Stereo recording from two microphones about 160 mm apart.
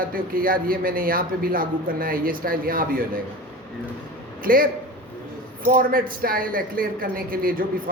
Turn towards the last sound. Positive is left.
turn(degrees=-65)  # may be behind; listen again after turning